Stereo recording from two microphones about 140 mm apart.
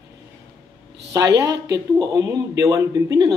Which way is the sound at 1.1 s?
25° right (ahead or behind).